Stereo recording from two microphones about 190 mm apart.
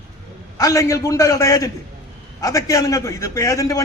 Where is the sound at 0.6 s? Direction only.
15° left (ahead or behind).